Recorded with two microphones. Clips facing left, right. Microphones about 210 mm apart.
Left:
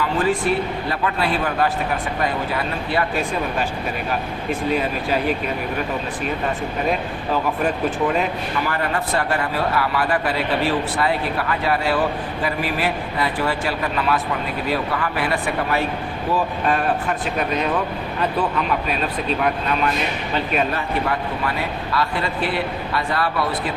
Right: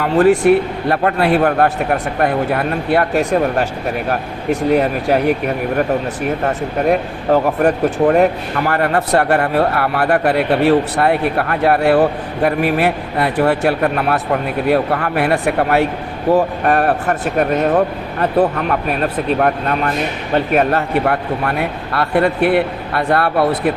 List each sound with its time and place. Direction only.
0.0 s speech: 65° right (ahead or behind)